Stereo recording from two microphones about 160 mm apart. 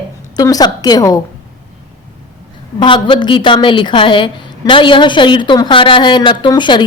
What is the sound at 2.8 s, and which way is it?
A woman's voice, 30° left (ahead or behind).